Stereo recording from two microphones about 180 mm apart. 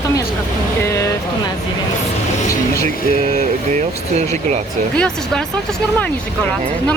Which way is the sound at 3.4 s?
40° right (ahead or behind).